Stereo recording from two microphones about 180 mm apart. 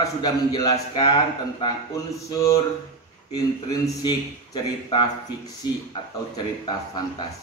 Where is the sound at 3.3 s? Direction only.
20° left (ahead or behind).